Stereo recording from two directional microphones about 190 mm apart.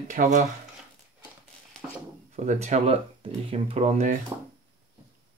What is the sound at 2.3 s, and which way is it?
Speech, 35° right (ahead or behind).